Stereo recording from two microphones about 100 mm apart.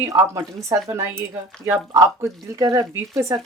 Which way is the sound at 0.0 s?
30° right (ahead or behind).